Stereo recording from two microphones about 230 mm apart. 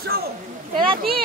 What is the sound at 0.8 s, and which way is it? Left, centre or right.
Speech, right.